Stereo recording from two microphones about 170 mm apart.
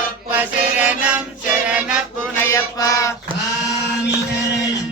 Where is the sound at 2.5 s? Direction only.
20° left (ahead or behind).